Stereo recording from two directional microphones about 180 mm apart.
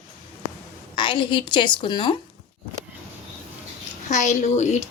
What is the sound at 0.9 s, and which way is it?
A woman's voice, 25° left (ahead or behind).